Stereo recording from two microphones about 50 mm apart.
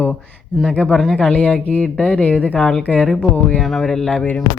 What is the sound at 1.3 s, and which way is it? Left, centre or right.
Speech, left.